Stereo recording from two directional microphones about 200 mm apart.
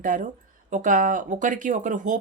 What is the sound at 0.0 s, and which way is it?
Speech, 40° right (ahead or behind).